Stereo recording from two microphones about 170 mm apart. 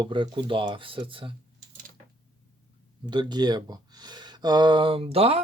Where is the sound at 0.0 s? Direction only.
30° right (ahead or behind).